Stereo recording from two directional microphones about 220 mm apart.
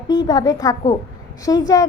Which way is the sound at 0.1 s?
15° left (ahead or behind).